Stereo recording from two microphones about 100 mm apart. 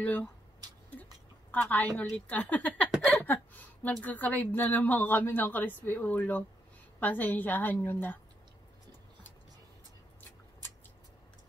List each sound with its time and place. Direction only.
0.0 s a woman's voice: 15° left (ahead or behind)
1.5 s a woman's voice: 15° left (ahead or behind)